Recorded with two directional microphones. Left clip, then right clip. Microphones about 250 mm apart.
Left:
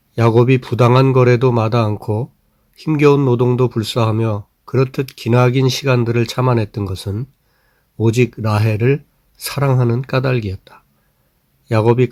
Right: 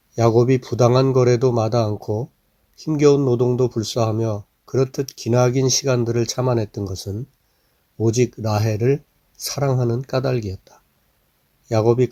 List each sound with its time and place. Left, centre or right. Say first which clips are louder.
0.2 s speech: left 3 dB; centre